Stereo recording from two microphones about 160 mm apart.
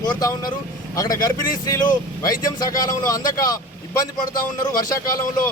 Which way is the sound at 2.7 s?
20° left (ahead or behind).